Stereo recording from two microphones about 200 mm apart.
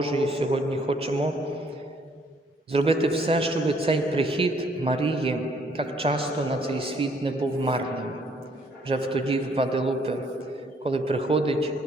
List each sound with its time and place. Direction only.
0.0 s a man's voice: 30° right (ahead or behind)
2.7 s a man's voice: 30° right (ahead or behind)
8.9 s a man's voice: 25° right (ahead or behind)